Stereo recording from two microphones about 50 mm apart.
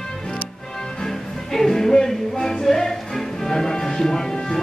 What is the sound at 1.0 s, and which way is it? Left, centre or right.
Music, centre.